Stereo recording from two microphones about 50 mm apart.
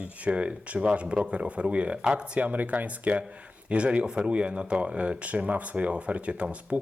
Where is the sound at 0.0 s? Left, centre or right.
Right.